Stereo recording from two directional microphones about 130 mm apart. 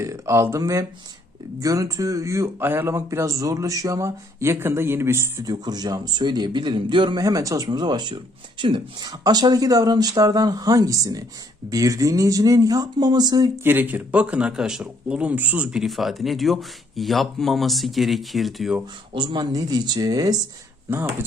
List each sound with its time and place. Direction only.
0.0 s speech: 20° right (ahead or behind)
5.5 s a man's voice: 30° right (ahead or behind)
13.7 s speech: 15° right (ahead or behind)
19.1 s a man's voice: 35° right (ahead or behind); by 21.2 s 20° right (ahead or behind)